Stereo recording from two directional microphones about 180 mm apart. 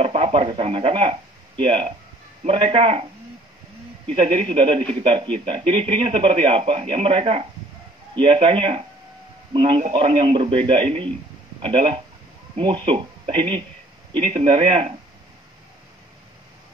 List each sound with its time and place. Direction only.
0.0 s a man's voice: 30° right (ahead or behind)
4.1 s a man's voice: 30° right (ahead or behind)